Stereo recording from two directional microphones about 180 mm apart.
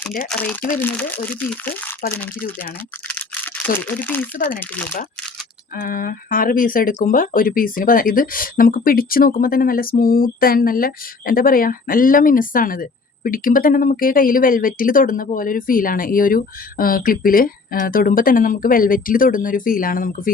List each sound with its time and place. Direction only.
0.3 s speech: 10° left (ahead or behind)
2.4 s speech: 50° left (ahead or behind)
3.1 s typing: 10° left (ahead or behind)
3.8 s speech: 10° left (ahead or behind)
4.4 s speech: 50° left (ahead or behind)
4.6 s speech: 10° left (ahead or behind)
5.7 s speech: 50° left (ahead or behind)